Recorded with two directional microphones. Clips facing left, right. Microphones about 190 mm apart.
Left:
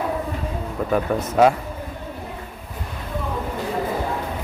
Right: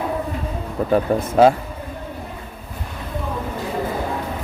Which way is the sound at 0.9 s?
30° right (ahead or behind).